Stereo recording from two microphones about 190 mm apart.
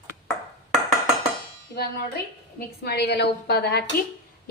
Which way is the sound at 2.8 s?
60° left (ahead or behind).